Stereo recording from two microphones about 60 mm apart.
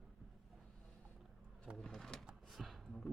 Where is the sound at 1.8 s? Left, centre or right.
Centre.